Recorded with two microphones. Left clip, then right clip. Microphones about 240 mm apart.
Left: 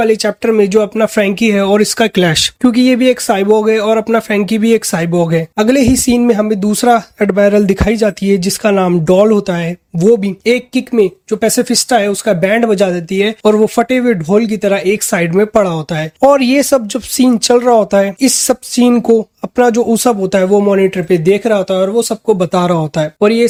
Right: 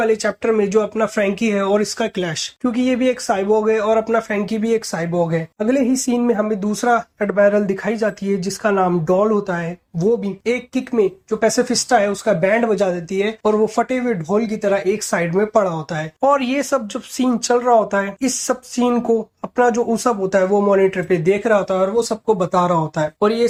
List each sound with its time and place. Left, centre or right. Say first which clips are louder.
0.0 s speech: left 6 dB; left